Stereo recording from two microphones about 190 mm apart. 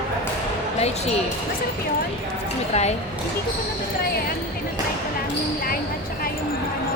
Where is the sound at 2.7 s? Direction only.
35° left (ahead or behind).